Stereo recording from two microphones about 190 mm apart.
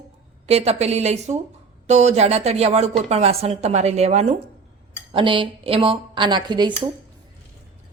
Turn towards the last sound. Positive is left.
turn(degrees=-25)  # may be behind; listen again after turning